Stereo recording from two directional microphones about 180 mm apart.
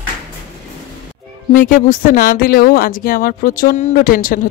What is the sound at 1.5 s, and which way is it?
Speech, 50° left (ahead or behind).